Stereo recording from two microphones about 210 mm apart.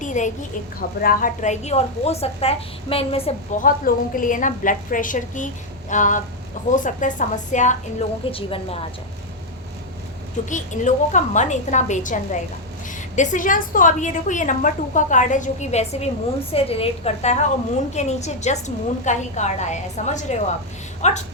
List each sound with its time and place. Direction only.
0.0 s a sound: 35° left (ahead or behind)
0.8 s a woman's voice: 40° left (ahead or behind)
3.6 s a woman's voice: 40° left (ahead or behind)
8.2 s a woman's voice: 25° left (ahead or behind)
10.5 s a woman's voice: 35° left (ahead or behind)